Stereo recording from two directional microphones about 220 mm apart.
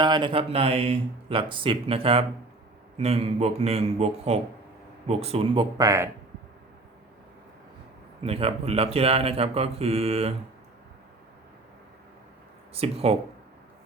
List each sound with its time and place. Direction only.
0.0 s speech: 20° right (ahead or behind)
8.2 s speech: 25° right (ahead or behind)
12.7 s speech: 25° right (ahead or behind)